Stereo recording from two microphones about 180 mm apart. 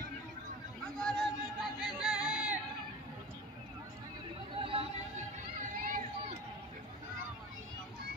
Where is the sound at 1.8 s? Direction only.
5° right (ahead or behind).